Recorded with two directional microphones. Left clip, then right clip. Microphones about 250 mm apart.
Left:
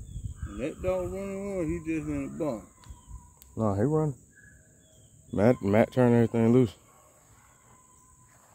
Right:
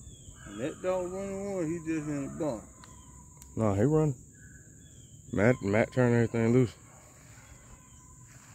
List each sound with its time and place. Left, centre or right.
0.6 s speech: left
3.5 s speech: centre
5.3 s speech: centre